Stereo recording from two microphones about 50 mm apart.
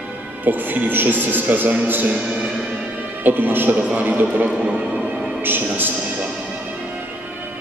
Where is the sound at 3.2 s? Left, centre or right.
Right.